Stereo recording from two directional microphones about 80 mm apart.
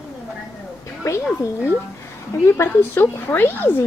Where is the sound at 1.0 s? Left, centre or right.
Left.